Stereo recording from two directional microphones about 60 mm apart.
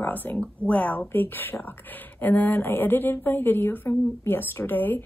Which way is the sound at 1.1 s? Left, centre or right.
Left.